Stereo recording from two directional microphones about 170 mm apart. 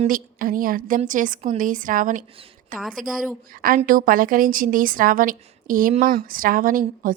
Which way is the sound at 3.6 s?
55° right (ahead or behind).